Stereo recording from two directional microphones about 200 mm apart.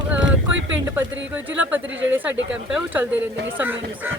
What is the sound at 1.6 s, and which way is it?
Speech, 10° right (ahead or behind).